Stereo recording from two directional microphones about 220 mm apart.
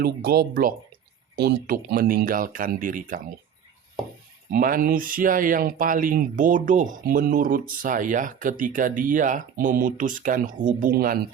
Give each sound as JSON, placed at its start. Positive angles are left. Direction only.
{"t": 0.0, "sound": "speech", "side_deg": -45}
{"t": 4.5, "sound": "speech", "side_deg": -40}